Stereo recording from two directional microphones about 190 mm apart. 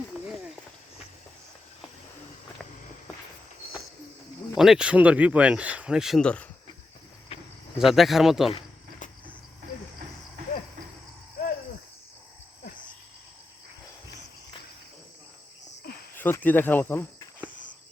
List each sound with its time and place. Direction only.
4.5 s speech: centre (ahead or behind)
7.3 s cricket: 30° left (ahead or behind)
7.8 s speech: centre (ahead or behind)
8.4 s cricket: 30° left (ahead or behind)
16.1 s speech: 10° left (ahead or behind)